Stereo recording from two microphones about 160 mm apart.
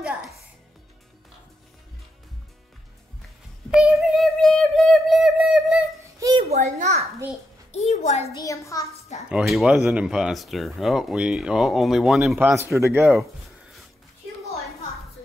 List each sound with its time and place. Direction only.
0.0 s music: 5° right (ahead or behind)
3.7 s a sound: centre (ahead or behind)
6.1 s a sound: 20° right (ahead or behind)
6.5 s a child's voice: 45° right (ahead or behind)
7.7 s a woman's voice: 45° left (ahead or behind)
8.4 s a child's voice: 20° left (ahead or behind)
9.3 s speech: centre (ahead or behind)
12.4 s speech: 15° right (ahead or behind)